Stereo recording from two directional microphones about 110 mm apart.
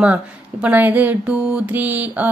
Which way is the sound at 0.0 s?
10° right (ahead or behind).